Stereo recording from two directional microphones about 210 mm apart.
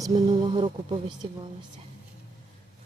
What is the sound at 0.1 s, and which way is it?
Speech, 25° right (ahead or behind).